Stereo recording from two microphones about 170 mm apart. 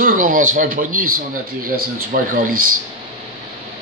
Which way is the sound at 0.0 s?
50° right (ahead or behind).